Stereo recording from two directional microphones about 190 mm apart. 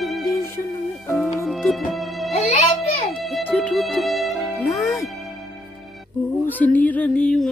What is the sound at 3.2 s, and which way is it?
Music, 5° left (ahead or behind).